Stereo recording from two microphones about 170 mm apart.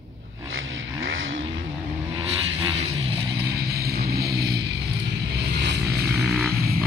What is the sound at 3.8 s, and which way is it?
Vehicle, 65° right (ahead or behind).